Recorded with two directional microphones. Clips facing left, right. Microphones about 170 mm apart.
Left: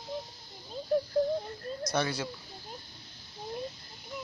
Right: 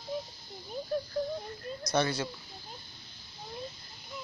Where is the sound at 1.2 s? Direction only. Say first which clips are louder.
Left 6 dB; 25° left (ahead or behind).